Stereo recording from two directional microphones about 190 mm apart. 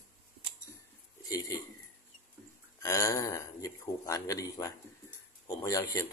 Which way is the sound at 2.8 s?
15° left (ahead or behind).